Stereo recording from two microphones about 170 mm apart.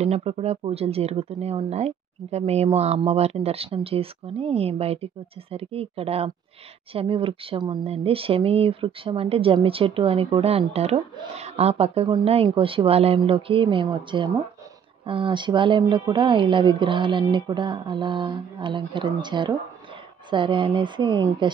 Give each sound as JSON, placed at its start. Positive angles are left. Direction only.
{"t": 0.0, "sound": "a woman's voice", "side_deg": -35}